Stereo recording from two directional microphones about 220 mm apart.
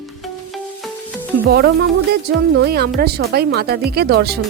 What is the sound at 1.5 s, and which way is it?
Speech, 45° right (ahead or behind).